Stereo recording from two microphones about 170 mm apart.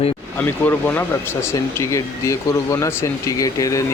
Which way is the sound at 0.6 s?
10° left (ahead or behind).